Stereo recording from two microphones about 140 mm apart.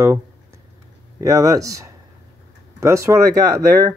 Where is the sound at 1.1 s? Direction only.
25° right (ahead or behind).